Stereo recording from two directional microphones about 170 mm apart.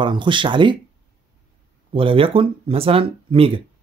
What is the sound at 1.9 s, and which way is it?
Speech, 30° right (ahead or behind).